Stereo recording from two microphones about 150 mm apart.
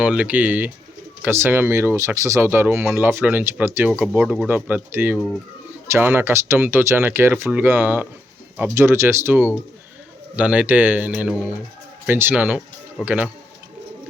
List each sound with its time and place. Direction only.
0.0 s speech: 10° right (ahead or behind)